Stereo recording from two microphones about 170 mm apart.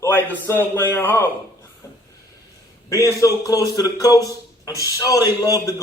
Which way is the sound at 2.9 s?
20° left (ahead or behind).